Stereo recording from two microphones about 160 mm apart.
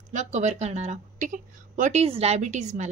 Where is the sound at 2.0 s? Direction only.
40° right (ahead or behind).